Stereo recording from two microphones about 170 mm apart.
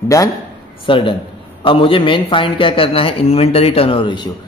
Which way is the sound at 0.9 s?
30° left (ahead or behind).